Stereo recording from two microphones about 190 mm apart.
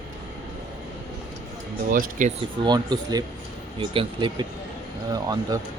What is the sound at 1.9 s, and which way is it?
Speech, 40° right (ahead or behind).